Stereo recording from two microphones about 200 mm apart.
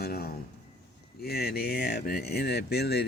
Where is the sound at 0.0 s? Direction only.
50° left (ahead or behind).